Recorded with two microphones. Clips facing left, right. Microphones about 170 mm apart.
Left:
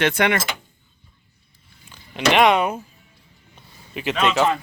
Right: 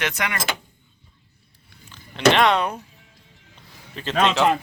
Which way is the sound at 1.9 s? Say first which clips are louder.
Right 1 dB; 15° left (ahead or behind).